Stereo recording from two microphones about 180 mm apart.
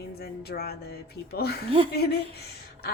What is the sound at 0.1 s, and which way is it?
A woman's voice, 60° left (ahead or behind).